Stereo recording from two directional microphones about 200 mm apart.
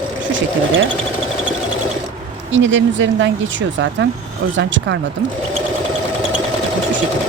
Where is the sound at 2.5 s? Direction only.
65° right (ahead or behind).